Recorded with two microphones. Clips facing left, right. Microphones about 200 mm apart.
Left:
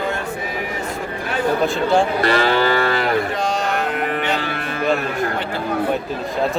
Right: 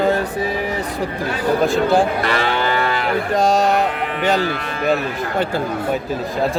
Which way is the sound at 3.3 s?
40° right (ahead or behind).